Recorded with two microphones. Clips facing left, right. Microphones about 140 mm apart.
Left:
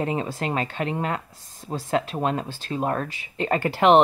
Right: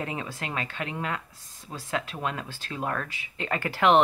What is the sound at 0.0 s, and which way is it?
Speech, 30° left (ahead or behind).